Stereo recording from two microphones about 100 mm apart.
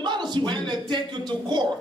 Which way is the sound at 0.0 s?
50° right (ahead or behind).